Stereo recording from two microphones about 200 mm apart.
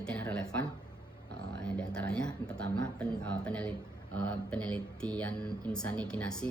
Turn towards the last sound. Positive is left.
turn(degrees=5)  # may be behind; listen again after turning